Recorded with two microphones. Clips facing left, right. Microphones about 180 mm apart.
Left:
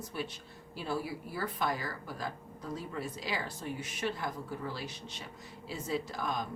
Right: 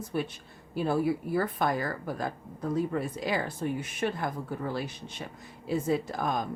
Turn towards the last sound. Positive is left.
turn(degrees=-50)  # may be behind; listen again after turning